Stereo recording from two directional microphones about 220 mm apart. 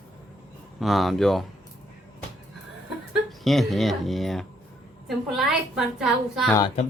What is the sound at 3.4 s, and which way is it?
Speech, centre (ahead or behind).